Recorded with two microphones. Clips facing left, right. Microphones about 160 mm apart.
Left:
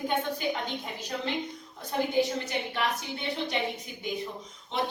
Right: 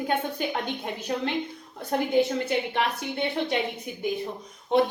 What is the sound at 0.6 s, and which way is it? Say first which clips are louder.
A woman's voice: right 5 dB; 55° right (ahead or behind).